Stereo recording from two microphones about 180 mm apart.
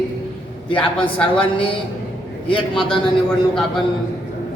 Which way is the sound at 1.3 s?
30° left (ahead or behind).